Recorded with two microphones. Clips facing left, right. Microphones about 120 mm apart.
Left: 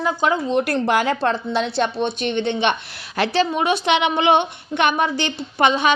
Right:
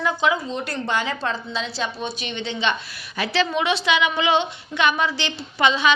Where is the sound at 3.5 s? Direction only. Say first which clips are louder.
Left 2 dB; 45° left (ahead or behind).